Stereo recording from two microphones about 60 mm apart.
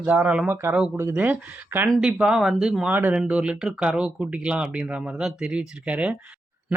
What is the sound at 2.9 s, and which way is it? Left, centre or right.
Speech, right.